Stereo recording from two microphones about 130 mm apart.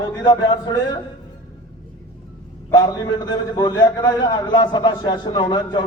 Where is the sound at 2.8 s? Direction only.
35° left (ahead or behind).